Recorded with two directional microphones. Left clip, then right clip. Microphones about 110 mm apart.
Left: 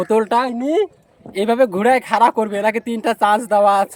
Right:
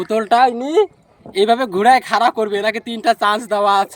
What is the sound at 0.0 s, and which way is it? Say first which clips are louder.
Speech: right 3 dB; 25° left (ahead or behind).